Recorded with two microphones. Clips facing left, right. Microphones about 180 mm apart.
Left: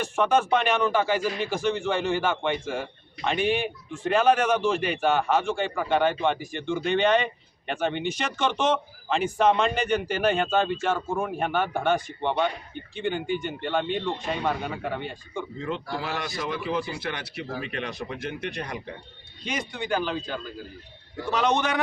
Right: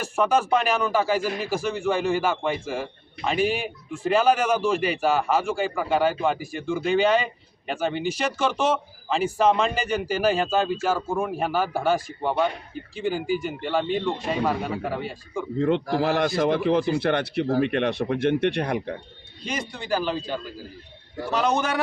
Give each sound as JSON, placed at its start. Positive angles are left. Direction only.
{"t": 0.0, "sound": "speech", "side_deg": -5}
{"t": 15.5, "sound": "speech", "side_deg": -55}
{"t": 19.4, "sound": "speech", "side_deg": 0}